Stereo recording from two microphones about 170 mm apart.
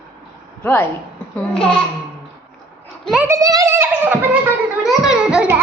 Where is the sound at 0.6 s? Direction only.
10° left (ahead or behind).